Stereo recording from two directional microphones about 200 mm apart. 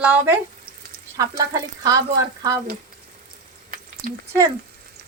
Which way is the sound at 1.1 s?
15° right (ahead or behind).